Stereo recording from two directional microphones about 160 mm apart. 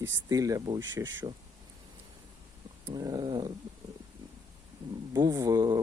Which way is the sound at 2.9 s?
25° right (ahead or behind).